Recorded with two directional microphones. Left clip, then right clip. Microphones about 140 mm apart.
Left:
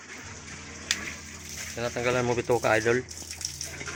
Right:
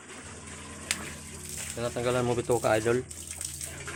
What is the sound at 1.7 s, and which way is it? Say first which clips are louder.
Speech: left 2 dB; 10° right (ahead or behind).